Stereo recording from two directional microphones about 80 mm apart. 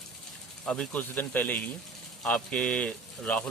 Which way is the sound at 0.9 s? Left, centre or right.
Left.